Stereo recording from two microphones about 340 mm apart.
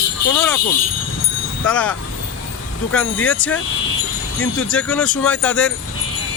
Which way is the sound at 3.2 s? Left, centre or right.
Left.